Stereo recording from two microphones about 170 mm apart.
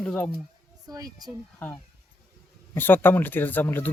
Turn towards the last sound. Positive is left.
turn(degrees=10)  # may be behind; listen again after turning